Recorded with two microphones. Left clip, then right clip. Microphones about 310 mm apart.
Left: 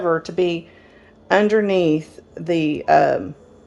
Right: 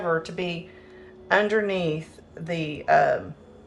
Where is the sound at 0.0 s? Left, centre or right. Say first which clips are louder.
Left 7 dB; left.